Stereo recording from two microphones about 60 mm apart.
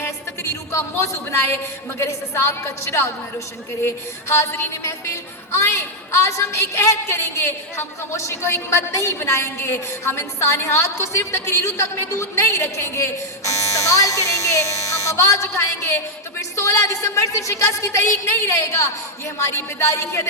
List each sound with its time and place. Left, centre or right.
0.7 s a woman's voice: left
14.0 s a sound: left
17.8 s a woman's voice: left